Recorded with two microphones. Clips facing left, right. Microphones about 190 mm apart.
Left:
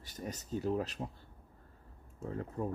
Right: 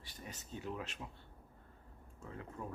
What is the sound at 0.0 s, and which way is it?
Speech, 45° left (ahead or behind).